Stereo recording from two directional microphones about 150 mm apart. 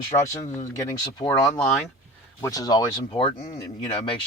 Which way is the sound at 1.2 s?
25° left (ahead or behind).